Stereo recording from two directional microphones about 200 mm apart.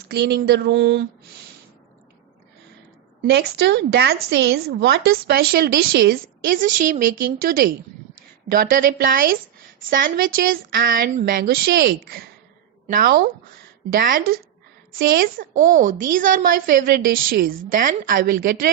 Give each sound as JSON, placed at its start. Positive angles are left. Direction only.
{"t": 0.1, "sound": "speech", "side_deg": -55}
{"t": 3.2, "sound": "a woman's voice", "side_deg": -55}